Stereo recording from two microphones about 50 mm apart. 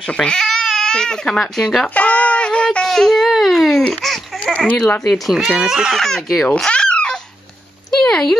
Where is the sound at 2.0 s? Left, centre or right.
Left.